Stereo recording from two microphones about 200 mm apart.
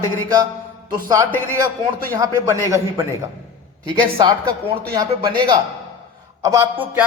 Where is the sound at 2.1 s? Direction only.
15° right (ahead or behind).